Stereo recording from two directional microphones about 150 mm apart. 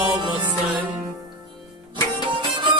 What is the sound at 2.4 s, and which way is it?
Music, 30° right (ahead or behind).